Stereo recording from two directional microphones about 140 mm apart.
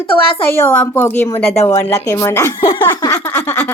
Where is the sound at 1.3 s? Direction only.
45° left (ahead or behind).